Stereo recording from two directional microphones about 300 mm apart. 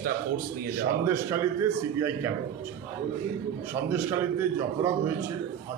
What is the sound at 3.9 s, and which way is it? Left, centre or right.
A man's voice, centre.